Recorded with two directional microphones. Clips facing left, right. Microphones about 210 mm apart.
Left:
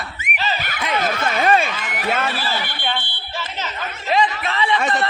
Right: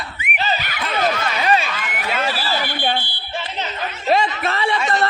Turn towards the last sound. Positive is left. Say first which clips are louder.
# even
turn(degrees=-45)  # may be behind; listen again after turning